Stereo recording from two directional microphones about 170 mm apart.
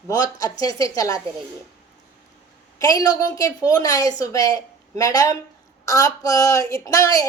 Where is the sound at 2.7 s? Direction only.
20° left (ahead or behind).